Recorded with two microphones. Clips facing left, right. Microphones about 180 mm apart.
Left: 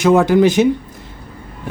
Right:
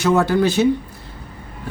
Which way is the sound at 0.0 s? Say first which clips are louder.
Left 5 dB; 15° left (ahead or behind).